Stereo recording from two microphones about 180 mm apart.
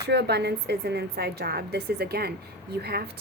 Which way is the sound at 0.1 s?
65° right (ahead or behind).